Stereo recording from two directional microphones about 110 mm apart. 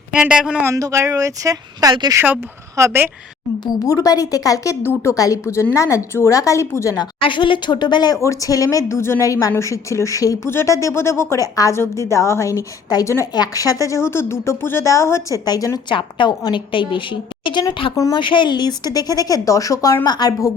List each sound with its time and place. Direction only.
0.1 s speech: 10° right (ahead or behind)
0.6 s speech: 30° right (ahead or behind)
2.2 s a woman's voice: 20° right (ahead or behind)
3.6 s a woman's voice: 35° left (ahead or behind)
7.2 s a woman's voice: 50° left (ahead or behind)
15.9 s a woman's voice: 45° left (ahead or behind)
17.9 s a woman's voice: 30° left (ahead or behind)
18.2 s a woman's voice: 45° left (ahead or behind)